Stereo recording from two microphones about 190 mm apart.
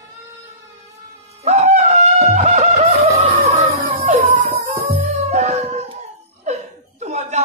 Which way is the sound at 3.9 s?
35° right (ahead or behind).